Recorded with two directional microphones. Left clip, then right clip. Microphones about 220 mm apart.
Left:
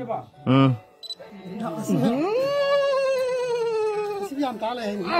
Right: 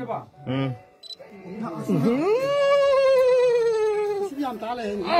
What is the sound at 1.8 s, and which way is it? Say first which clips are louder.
Cat: right 1 dB; 20° right (ahead or behind).